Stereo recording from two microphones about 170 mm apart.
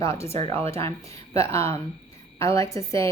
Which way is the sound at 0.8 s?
35° right (ahead or behind).